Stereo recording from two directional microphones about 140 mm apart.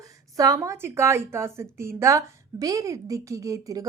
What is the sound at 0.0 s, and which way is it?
A woman's voice, 25° right (ahead or behind).